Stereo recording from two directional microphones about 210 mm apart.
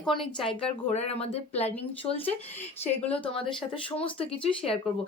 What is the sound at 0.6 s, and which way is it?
Speech, 30° left (ahead or behind).